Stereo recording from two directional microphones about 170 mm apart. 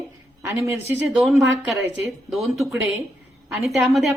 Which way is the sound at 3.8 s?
Centre (ahead or behind).